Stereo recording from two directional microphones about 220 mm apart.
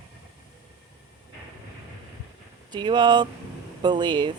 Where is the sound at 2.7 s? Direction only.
20° right (ahead or behind).